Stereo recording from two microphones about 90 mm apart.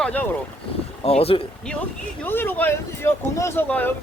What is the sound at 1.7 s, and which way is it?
Speech, 10° left (ahead or behind).